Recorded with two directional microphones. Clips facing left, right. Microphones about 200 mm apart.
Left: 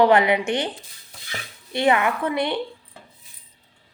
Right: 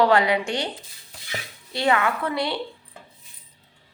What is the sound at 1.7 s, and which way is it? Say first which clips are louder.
Speech: left 2 dB; 20° left (ahead or behind).